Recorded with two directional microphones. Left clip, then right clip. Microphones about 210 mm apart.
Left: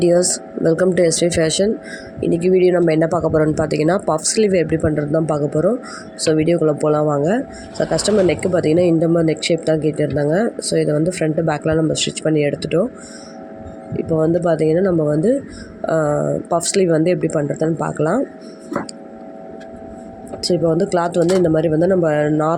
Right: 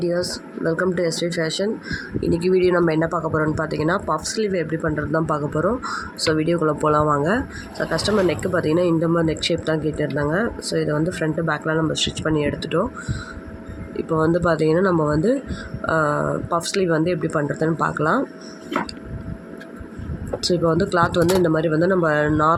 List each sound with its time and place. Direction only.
0.0 s speech: 35° left (ahead or behind)
2.2 s speech: 20° left (ahead or behind)
13.9 s speech: 15° left (ahead or behind)
20.4 s speech: 15° left (ahead or behind)